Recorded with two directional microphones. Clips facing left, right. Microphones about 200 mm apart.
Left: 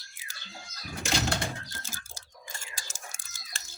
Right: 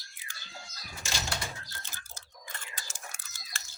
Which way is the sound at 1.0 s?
60° left (ahead or behind).